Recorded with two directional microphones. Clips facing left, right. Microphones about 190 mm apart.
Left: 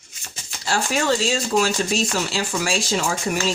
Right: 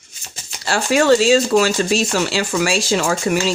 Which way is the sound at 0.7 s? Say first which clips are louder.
Right 7 dB; 75° right (ahead or behind).